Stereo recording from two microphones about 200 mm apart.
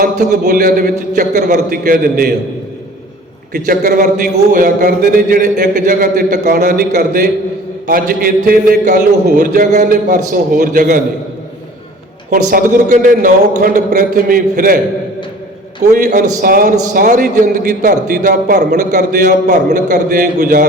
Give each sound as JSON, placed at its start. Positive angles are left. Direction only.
{"t": 0.0, "sound": "a man's voice", "side_deg": -45}
{"t": 3.5, "sound": "a man's voice", "side_deg": -45}
{"t": 12.3, "sound": "a man's voice", "side_deg": -40}
{"t": 15.9, "sound": "a man's voice", "side_deg": -35}